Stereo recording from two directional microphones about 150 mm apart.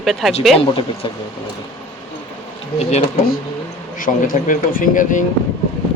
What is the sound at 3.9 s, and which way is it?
Speech, 65° left (ahead or behind).